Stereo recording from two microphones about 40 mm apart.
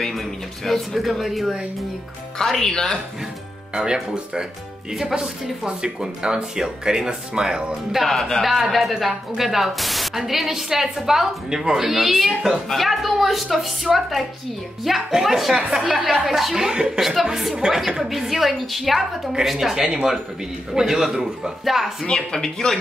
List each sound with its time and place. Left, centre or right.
0.7 s speech: centre
2.4 s speech: centre
3.7 s speech: centre
8.0 s speech: centre
15.0 s speech: centre
16.7 s speech: right
17.0 s speech: centre
22.0 s speech: centre